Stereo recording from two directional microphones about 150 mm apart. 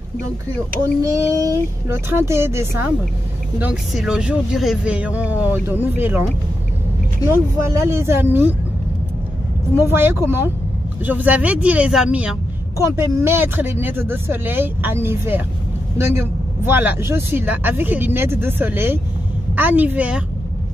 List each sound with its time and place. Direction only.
1.0 s child singing: 20° right (ahead or behind)
2.0 s speech: 15° right (ahead or behind)
7.2 s speech: 15° right (ahead or behind)
9.8 s speech: 15° right (ahead or behind)
12.7 s speech: 15° right (ahead or behind)